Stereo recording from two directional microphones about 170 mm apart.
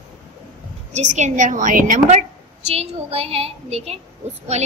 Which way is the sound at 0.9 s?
45° right (ahead or behind).